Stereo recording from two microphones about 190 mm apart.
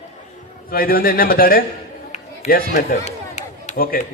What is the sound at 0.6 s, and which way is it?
Speech, 50° left (ahead or behind).